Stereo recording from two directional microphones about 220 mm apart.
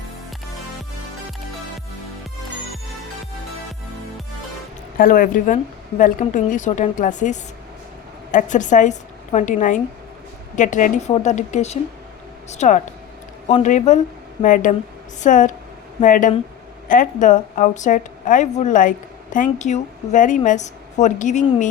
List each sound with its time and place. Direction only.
4.9 s a woman's voice: 40° left (ahead or behind)